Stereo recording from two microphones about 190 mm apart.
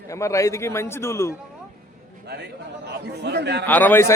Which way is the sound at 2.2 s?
60° right (ahead or behind).